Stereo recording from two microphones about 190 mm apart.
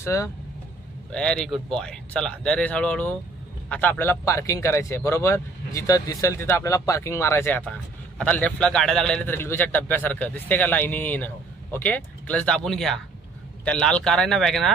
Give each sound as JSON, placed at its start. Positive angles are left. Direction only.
{"t": 0.0, "sound": "speech", "side_deg": 15}
{"t": 1.1, "sound": "speech", "side_deg": 5}